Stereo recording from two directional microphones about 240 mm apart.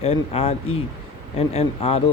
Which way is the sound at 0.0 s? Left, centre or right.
Left.